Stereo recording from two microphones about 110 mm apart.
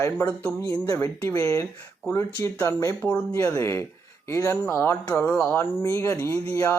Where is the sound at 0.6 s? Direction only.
35° left (ahead or behind).